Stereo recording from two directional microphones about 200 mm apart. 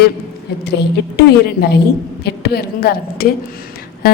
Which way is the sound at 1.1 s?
55° left (ahead or behind).